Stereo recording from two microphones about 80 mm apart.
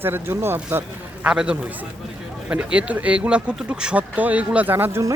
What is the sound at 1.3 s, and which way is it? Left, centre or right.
Speech, centre.